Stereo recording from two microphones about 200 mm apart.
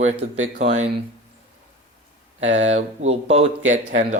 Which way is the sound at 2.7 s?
30° right (ahead or behind).